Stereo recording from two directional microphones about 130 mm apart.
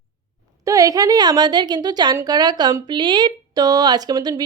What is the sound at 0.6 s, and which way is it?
A woman's voice, 25° right (ahead or behind).